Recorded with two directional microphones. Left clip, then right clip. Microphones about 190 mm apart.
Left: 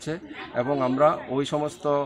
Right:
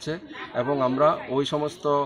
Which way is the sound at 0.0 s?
5° left (ahead or behind).